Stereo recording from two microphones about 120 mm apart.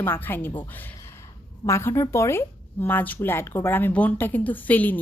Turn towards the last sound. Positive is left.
turn(degrees=15)  # may be behind; listen again after turning